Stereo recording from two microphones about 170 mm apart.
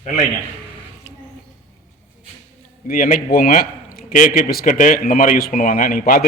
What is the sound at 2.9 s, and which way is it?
A man's voice, 55° left (ahead or behind).